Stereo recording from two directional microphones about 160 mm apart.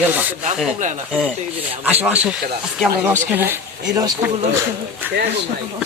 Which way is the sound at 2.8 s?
15° right (ahead or behind).